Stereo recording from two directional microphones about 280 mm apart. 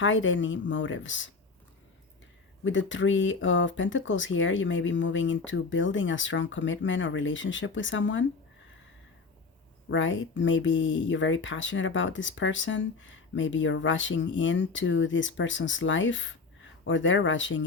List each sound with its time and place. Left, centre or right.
0.0 s speech: left
2.6 s speech: left
9.9 s speech: left